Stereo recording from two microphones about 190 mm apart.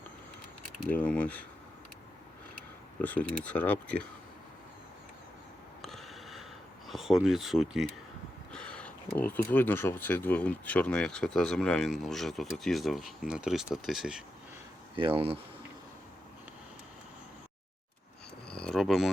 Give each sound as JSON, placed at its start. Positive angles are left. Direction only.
{"t": 0.8, "sound": "speech", "side_deg": 5}
{"t": 3.0, "sound": "speech", "side_deg": 10}
{"t": 5.8, "sound": "a sound", "side_deg": 0}
{"t": 6.8, "sound": "speech", "side_deg": 0}
{"t": 14.9, "sound": "speech", "side_deg": -30}
{"t": 18.4, "sound": "a sound", "side_deg": 5}